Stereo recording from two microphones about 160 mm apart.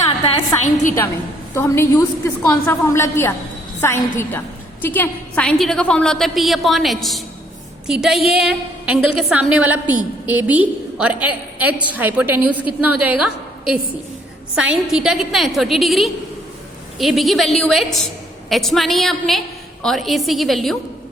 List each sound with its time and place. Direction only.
0.6 s a woman's voice: 50° left (ahead or behind)
1.5 s a woman's voice: 15° left (ahead or behind); by 20.7 s centre (ahead or behind)